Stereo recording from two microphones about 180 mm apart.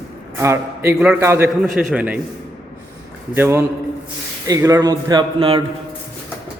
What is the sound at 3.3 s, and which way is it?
A man's voice, 15° right (ahead or behind).